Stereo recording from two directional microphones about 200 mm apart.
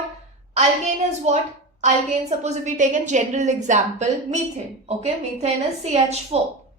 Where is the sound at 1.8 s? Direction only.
35° right (ahead or behind).